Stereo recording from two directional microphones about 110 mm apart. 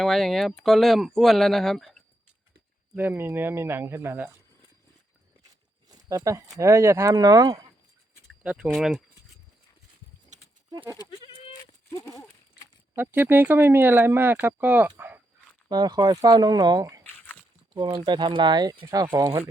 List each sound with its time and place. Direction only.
0.0 s speech: centre (ahead or behind)
2.9 s speech: 20° right (ahead or behind)
6.1 s speech: 30° right (ahead or behind)
8.4 s speech: 5° right (ahead or behind)
11.9 s a sound: 25° left (ahead or behind)
13.0 s speech: 20° right (ahead or behind)
15.7 s speech: 35° right (ahead or behind)
17.1 s crumpling: 15° left (ahead or behind)
17.7 s speech: 45° right (ahead or behind)
19.0 s speech: 25° right (ahead or behind)